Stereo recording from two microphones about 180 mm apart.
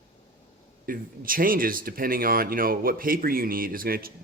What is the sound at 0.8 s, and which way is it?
Speech, 50° right (ahead or behind).